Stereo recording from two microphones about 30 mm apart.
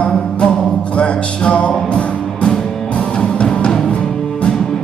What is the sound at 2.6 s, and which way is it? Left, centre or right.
Music, centre.